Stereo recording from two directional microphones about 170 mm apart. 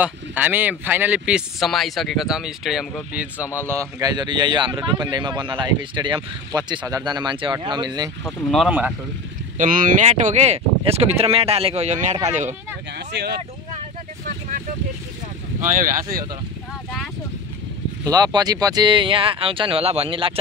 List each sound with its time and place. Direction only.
0.0 s speech: 10° right (ahead or behind)
4.0 s speech: 25° right (ahead or behind)
8.2 s speech: 5° left (ahead or behind)
8.6 s speech: 10° right (ahead or behind)
9.6 s speech: 55° right (ahead or behind)
12.9 s a sound: 75° right (ahead or behind)
15.6 s speech: 50° right (ahead or behind)
18.0 s speech: 25° right (ahead or behind)